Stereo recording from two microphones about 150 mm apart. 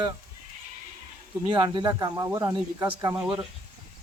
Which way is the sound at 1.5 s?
30° right (ahead or behind).